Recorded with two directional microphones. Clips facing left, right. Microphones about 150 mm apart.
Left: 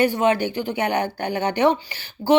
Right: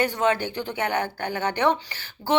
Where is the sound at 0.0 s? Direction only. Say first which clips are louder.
Left 4 dB; 10° left (ahead or behind).